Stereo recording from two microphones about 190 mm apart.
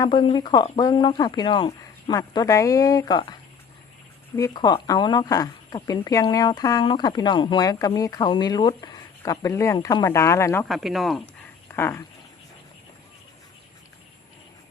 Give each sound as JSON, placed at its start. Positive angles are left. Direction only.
{"t": 0.0, "sound": "speech", "side_deg": 25}
{"t": 4.4, "sound": "speech", "side_deg": 15}
{"t": 10.7, "sound": "speech", "side_deg": 0}
{"t": 11.8, "sound": "speech", "side_deg": 10}